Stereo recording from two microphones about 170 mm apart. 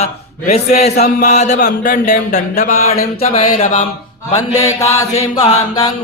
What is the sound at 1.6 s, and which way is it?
Speech, 55° left (ahead or behind).